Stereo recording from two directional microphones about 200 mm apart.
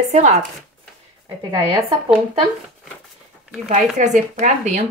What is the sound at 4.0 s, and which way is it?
Speech, 40° right (ahead or behind).